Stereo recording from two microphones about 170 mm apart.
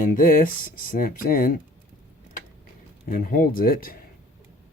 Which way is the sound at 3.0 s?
55° left (ahead or behind).